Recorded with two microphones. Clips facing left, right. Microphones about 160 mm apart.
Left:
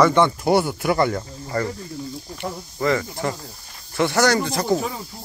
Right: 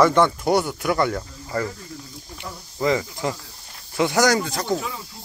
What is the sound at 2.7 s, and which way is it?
Cricket, 15° right (ahead or behind).